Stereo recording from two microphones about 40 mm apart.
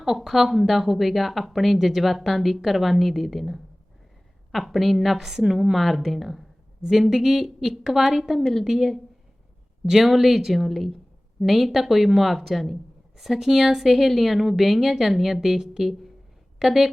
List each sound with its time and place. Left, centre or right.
0.2 s speech: centre
5.7 s a woman's voice: centre